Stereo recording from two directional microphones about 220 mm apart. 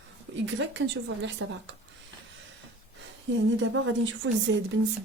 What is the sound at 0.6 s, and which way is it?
Speech, 55° right (ahead or behind).